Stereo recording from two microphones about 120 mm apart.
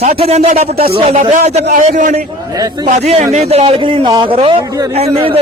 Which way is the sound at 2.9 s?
75° right (ahead or behind).